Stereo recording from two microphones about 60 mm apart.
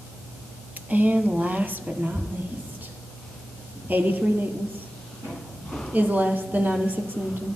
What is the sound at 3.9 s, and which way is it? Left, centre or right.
Speech, right.